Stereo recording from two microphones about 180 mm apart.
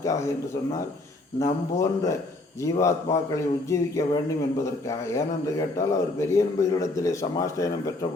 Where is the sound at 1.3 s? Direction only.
20° left (ahead or behind).